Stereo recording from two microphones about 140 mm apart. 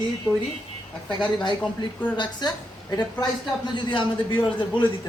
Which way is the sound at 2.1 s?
30° left (ahead or behind).